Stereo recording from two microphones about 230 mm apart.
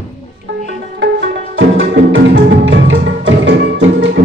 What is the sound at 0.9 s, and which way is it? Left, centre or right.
Music, right.